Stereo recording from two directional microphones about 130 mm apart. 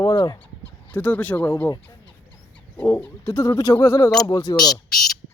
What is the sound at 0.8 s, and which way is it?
Speech, 15° left (ahead or behind).